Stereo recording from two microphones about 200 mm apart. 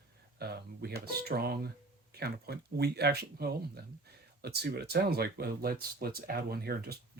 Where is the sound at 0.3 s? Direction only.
50° right (ahead or behind).